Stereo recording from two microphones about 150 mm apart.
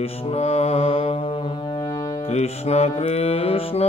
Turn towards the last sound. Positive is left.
turn(degrees=40)  # may be behind; listen again after turning